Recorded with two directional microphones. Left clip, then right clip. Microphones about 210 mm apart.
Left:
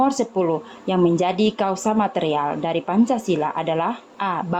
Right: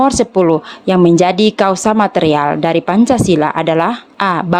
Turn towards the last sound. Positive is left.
turn(degrees=-40)  # may be behind; listen again after turning